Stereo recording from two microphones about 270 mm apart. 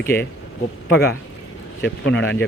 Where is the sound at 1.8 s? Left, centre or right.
Left.